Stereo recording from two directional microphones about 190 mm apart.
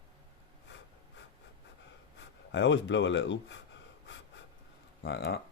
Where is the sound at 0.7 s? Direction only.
70° left (ahead or behind).